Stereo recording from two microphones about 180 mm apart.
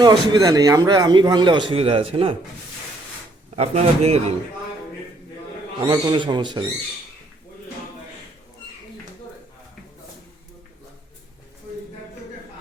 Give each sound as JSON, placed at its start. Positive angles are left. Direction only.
{"t": 0.0, "sound": "a man's voice", "side_deg": -20}
{"t": 3.5, "sound": "a man's voice", "side_deg": -35}
{"t": 5.8, "sound": "a man's voice", "side_deg": -25}